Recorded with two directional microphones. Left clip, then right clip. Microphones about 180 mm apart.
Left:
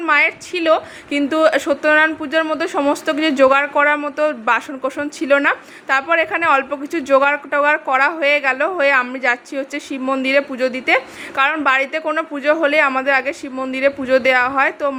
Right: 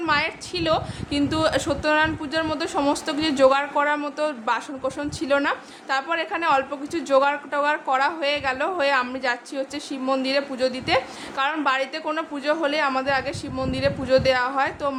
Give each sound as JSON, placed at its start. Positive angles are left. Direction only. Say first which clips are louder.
{"t": 0.1, "sound": "a woman's voice", "louder": "left 9 dB", "side_deg": 25}